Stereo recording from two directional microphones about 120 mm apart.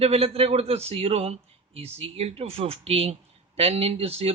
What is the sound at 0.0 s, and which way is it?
A man's voice, 55° right (ahead or behind).